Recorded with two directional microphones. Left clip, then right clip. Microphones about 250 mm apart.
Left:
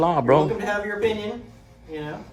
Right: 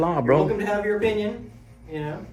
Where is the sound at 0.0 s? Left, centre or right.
Centre.